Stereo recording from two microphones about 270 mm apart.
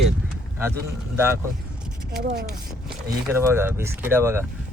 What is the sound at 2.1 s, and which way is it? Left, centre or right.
Speech, right.